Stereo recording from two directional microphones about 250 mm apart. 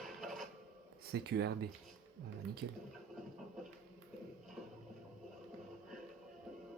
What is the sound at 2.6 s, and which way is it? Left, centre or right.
Speech, right.